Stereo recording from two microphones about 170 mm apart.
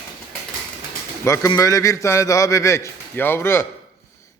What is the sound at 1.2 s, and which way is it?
A man's voice, 15° left (ahead or behind).